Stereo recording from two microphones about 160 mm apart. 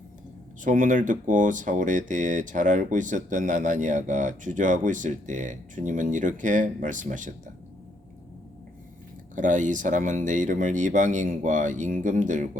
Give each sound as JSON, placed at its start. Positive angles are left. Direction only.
{"t": 0.6, "sound": "speech", "side_deg": -55}
{"t": 9.3, "sound": "speech", "side_deg": -55}